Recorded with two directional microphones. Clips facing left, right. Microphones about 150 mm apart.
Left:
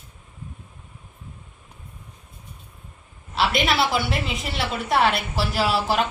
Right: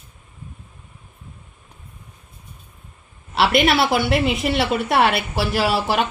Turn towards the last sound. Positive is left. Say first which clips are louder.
# right 2 dB
turn(degrees=-65)  # may be behind; listen again after turning